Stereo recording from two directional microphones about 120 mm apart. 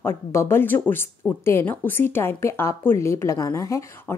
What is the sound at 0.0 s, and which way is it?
Speech, 20° left (ahead or behind).